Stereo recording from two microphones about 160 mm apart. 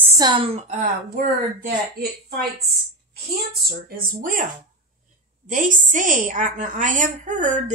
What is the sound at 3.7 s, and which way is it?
Speech, 65° right (ahead or behind).